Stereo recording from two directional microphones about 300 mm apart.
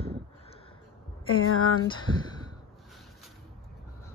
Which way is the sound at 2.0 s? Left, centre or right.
Centre.